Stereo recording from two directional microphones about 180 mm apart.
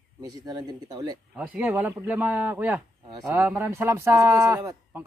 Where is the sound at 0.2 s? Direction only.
20° right (ahead or behind).